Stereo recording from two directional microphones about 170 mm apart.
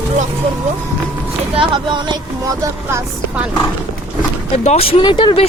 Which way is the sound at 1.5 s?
30° right (ahead or behind).